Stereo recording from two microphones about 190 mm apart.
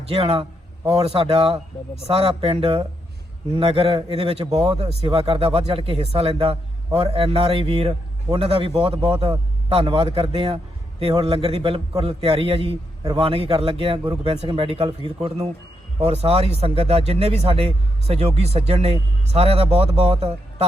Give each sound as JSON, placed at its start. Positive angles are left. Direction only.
{"t": 0.1, "sound": "a man's voice", "side_deg": -30}
{"t": 16.0, "sound": "speech", "side_deg": -30}